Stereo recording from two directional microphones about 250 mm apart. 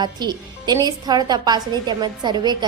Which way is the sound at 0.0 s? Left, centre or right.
Centre.